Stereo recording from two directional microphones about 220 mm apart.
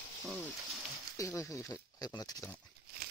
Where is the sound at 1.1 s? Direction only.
15° left (ahead or behind).